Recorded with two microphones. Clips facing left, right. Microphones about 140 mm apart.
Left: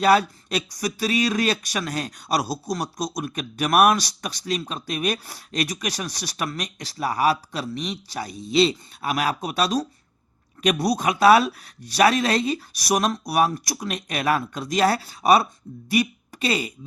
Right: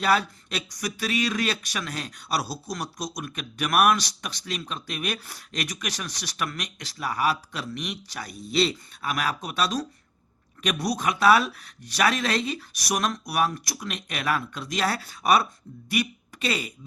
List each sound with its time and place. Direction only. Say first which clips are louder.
0.0 s speech: left 5 dB; 40° left (ahead or behind)